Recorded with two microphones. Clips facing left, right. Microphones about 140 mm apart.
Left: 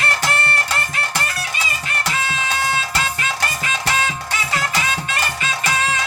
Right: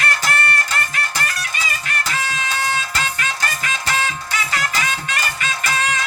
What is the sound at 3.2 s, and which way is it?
Music, 25° left (ahead or behind).